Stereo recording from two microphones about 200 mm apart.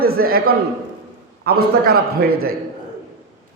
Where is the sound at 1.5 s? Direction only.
50° right (ahead or behind).